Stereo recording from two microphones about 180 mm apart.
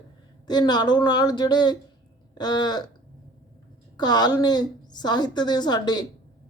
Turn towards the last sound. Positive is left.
turn(degrees=25)  # may be behind; listen again after turning